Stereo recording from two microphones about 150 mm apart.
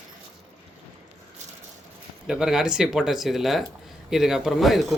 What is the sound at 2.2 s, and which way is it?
Speech, 5° right (ahead or behind).